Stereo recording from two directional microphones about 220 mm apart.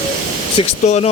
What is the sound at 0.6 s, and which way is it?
Speech, 30° left (ahead or behind).